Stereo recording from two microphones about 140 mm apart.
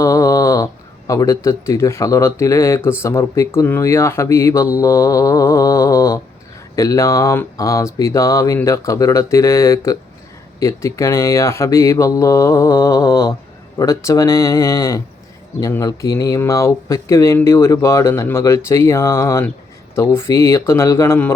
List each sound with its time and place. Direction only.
0.0 s speech: 25° left (ahead or behind)
4.8 s mantra: 20° left (ahead or behind)
6.7 s speech: 20° left (ahead or behind)